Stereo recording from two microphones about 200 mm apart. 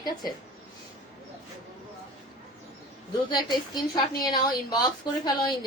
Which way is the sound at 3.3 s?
20° left (ahead or behind).